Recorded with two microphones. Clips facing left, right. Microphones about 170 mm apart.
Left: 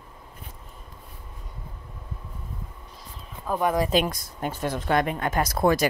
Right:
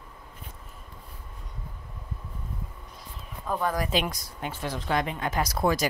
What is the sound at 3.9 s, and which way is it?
Speech, 45° left (ahead or behind).